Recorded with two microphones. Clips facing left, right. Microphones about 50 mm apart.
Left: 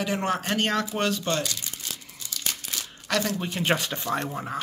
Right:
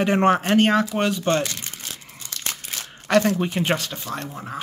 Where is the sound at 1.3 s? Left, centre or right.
Right.